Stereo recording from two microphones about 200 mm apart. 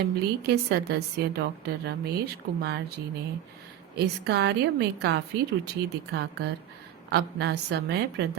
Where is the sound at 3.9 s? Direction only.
55° right (ahead or behind).